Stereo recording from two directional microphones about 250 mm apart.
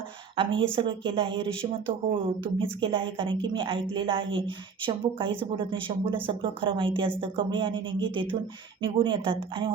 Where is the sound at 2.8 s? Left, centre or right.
Right.